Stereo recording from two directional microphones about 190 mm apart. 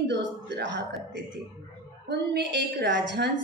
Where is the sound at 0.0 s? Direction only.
65° right (ahead or behind).